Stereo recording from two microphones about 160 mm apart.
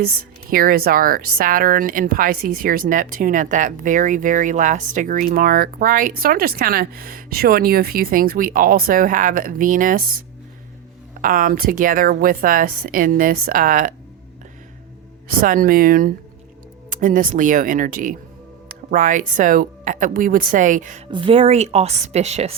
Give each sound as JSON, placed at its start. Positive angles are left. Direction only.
{"t": 0.5, "sound": "speech", "side_deg": -65}
{"t": 11.2, "sound": "speech", "side_deg": -60}
{"t": 15.4, "sound": "speech", "side_deg": -60}
{"t": 21.1, "sound": "a woman's voice", "side_deg": -35}